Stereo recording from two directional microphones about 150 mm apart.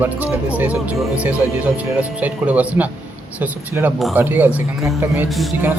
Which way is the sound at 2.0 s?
10° right (ahead or behind).